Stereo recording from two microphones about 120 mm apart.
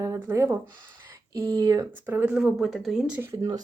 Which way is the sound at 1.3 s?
35° right (ahead or behind).